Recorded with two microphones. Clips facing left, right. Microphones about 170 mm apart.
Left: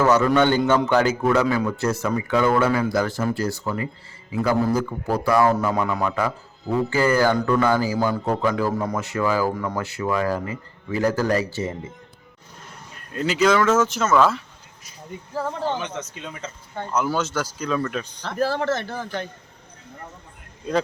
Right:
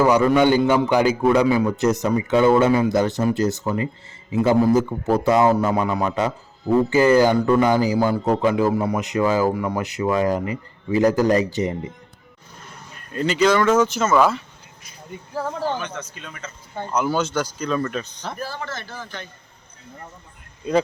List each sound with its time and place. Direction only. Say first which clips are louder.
0.0 s a man's voice: right 2 dB; 15° right (ahead or behind)
13.1 s speech: right 1 dB; 5° left (ahead or behind)
15.7 s speech: even; 20° left (ahead or behind)
16.9 s speech: right 2 dB; centre (ahead or behind)
18.3 s a man's voice: left 12 dB; 85° left; by 19.3 s 55° left (ahead or behind)